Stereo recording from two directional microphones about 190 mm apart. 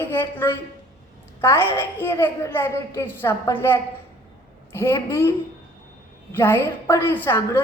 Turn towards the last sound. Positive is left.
turn(degrees=10)  # may be behind; listen again after turning